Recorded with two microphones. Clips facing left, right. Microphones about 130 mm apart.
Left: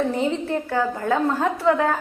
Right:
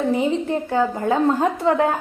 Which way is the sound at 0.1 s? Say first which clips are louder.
Right 3 dB; 15° right (ahead or behind).